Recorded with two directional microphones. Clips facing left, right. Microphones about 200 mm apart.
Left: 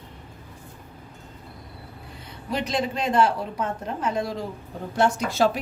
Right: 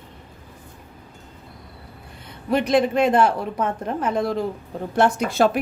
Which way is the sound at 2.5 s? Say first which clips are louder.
Right 8 dB; 55° right (ahead or behind).